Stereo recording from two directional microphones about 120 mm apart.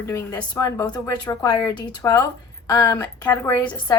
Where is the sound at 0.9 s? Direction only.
35° left (ahead or behind).